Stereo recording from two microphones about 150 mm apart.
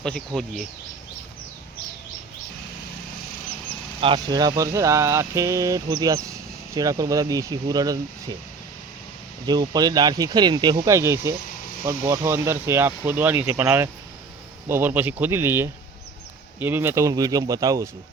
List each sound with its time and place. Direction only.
0.0 s speech: 5° left (ahead or behind)
4.0 s speech: 30° right (ahead or behind)
9.5 s speech: 25° right (ahead or behind)
10.8 s speech: 20° right (ahead or behind)